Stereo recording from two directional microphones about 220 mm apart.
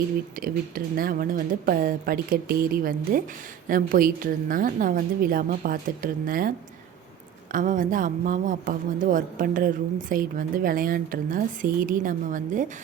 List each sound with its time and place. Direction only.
0.4 s speech: 40° right (ahead or behind)
7.5 s speech: 35° right (ahead or behind)